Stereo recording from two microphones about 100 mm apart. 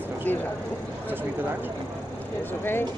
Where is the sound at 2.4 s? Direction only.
20° left (ahead or behind).